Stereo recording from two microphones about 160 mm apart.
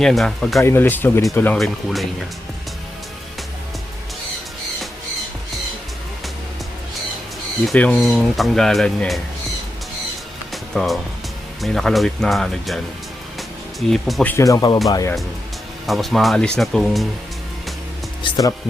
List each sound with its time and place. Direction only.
0.0 s speech: centre (ahead or behind)
0.6 s speech: 15° left (ahead or behind)
1.5 s speech: centre (ahead or behind)
7.7 s speech: 10° left (ahead or behind)
10.5 s music: centre (ahead or behind)
11.6 s speech: centre (ahead or behind)
14.3 s speech: 20° left (ahead or behind)
15.9 s speech: centre (ahead or behind)
18.2 s speech: 25° left (ahead or behind)